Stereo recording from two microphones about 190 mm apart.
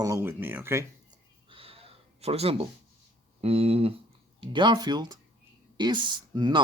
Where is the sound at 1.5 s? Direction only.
30° right (ahead or behind).